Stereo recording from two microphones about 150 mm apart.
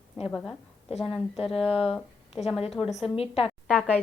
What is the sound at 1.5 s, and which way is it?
A woman's voice, 40° left (ahead or behind).